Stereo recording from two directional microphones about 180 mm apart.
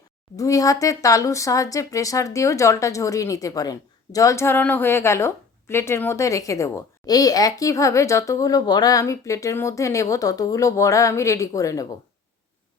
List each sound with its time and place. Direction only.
0.3 s speech: 20° left (ahead or behind)